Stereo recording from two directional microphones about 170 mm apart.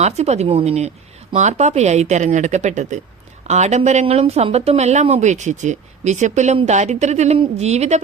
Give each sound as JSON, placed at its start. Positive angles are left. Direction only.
{"t": 0.0, "sound": "speech", "side_deg": -40}